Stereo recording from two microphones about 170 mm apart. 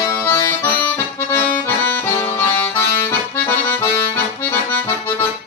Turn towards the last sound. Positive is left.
turn(degrees=10)  # may be behind; listen again after turning